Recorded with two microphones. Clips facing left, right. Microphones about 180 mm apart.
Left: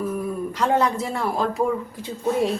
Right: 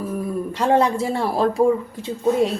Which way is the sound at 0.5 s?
30° right (ahead or behind).